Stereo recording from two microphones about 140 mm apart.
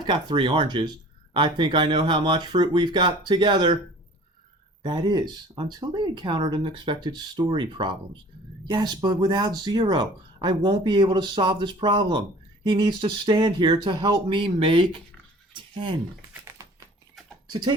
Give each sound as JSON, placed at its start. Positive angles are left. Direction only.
{"t": 0.0, "sound": "speech", "side_deg": -35}
{"t": 4.8, "sound": "speech", "side_deg": -35}
{"t": 15.5, "sound": "a sound", "side_deg": -35}